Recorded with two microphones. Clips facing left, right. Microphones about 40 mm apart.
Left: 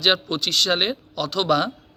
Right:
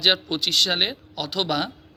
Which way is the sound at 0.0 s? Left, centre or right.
Centre.